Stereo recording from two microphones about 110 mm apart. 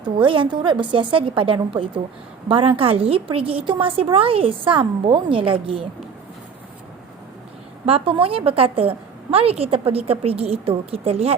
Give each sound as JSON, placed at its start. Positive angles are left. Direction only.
{"t": 0.0, "sound": "a woman's voice", "side_deg": -50}
{"t": 7.9, "sound": "a woman's voice", "side_deg": -60}